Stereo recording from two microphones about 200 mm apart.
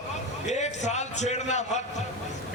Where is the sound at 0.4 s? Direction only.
35° left (ahead or behind).